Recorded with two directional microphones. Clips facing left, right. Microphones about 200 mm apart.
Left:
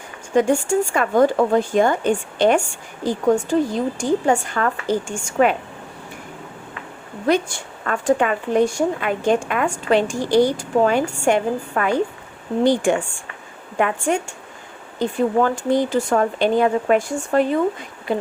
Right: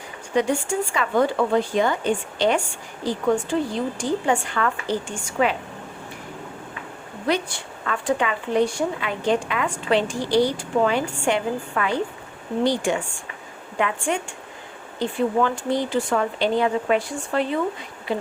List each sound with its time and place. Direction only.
0.3 s speech: 45° left (ahead or behind)
7.3 s speech: 45° left (ahead or behind)